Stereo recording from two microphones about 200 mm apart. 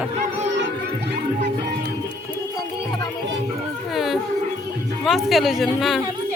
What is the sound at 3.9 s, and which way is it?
Speech, centre (ahead or behind).